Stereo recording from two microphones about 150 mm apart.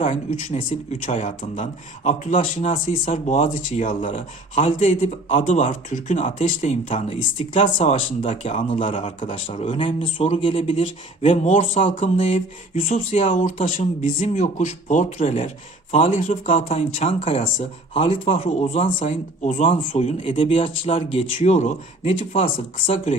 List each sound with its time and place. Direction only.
0.0 s speech: 55° left (ahead or behind)
9.0 s speech: 35° left (ahead or behind)
13.3 s speech: 60° left (ahead or behind); by 16.1 s 40° left (ahead or behind)
16.1 s speech: 55° left (ahead or behind)
19.4 s speech: 55° left (ahead or behind)
19.6 s speech: 35° left (ahead or behind); by 22.4 s 55° left (ahead or behind)
22.4 s speech: 40° left (ahead or behind)